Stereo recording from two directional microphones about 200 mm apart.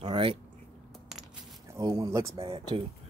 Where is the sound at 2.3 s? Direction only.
25° right (ahead or behind).